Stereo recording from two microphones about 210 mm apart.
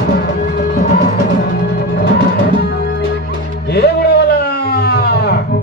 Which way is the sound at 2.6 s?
50° left (ahead or behind).